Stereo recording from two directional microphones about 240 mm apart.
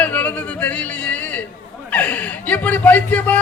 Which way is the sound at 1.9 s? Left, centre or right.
Centre.